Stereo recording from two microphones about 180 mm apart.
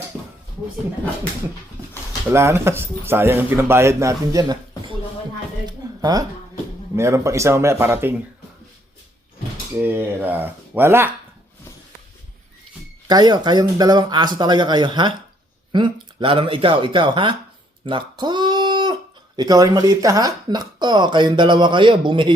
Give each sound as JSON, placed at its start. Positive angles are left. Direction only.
{"t": 2.3, "sound": "speech", "side_deg": -15}
{"t": 9.8, "sound": "speech", "side_deg": -10}
{"t": 13.1, "sound": "speech", "side_deg": -25}
{"t": 17.8, "sound": "a sound", "side_deg": -25}
{"t": 19.4, "sound": "speech", "side_deg": -20}